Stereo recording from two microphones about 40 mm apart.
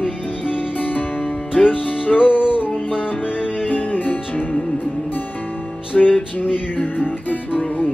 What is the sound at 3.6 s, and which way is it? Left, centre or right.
Music, left.